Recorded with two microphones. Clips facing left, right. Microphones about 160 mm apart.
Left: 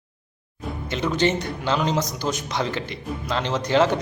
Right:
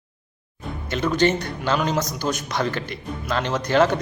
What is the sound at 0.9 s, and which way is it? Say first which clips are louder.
A man's voice: right 2 dB; 20° left (ahead or behind).